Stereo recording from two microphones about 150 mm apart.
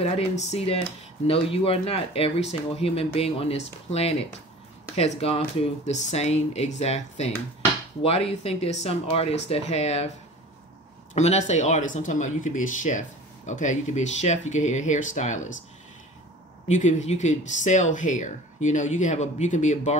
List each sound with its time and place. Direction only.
0.0 s speech: 45° left (ahead or behind)
11.1 s speech: 50° left (ahead or behind)
16.6 s speech: 50° left (ahead or behind)